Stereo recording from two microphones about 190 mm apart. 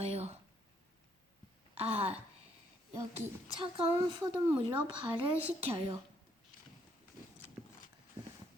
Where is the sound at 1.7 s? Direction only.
30° right (ahead or behind).